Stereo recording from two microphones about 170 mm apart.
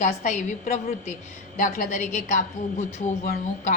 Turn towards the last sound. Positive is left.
turn(degrees=50)  # may be behind; listen again after turning